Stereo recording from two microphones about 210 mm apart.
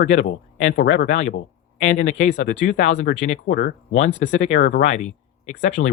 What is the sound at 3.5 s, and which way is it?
Speech, 60° left (ahead or behind).